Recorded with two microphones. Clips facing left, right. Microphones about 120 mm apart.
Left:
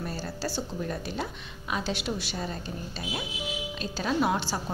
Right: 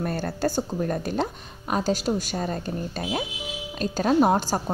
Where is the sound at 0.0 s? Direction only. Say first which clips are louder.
Right 8 dB; 55° right (ahead or behind).